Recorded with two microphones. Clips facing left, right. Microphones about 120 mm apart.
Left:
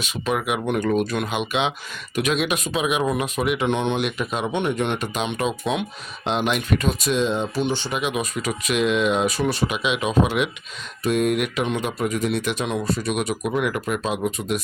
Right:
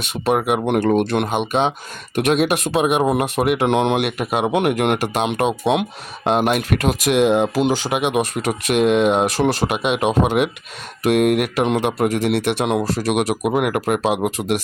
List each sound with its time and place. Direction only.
0.3 s speech: 50° right (ahead or behind)
0.9 s speech: 65° right (ahead or behind)
9.5 s speech: 75° right (ahead or behind); by 10.5 s 55° right (ahead or behind)
11.0 s speech: 70° right (ahead or behind)
14.3 s speech: 85° right